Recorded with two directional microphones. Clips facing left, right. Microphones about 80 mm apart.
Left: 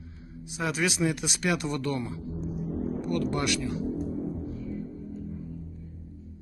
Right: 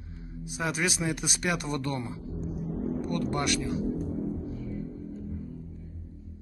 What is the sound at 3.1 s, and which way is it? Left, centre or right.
Speech, right.